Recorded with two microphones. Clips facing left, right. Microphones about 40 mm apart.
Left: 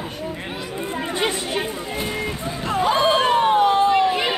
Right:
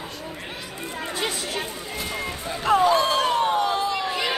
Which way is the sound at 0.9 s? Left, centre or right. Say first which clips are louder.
Left 5 dB; centre.